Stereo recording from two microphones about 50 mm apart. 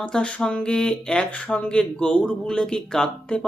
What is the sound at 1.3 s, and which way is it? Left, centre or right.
Speech, left.